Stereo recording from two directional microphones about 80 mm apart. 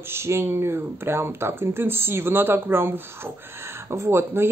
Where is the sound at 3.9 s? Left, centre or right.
Right.